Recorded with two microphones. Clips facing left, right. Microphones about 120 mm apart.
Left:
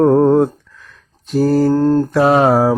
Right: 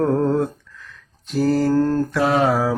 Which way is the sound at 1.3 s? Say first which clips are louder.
Left 5 dB; 45° left (ahead or behind).